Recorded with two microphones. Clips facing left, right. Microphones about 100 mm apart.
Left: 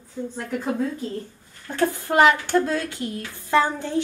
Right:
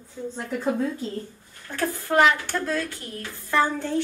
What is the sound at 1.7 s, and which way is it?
A woman's voice, 25° left (ahead or behind).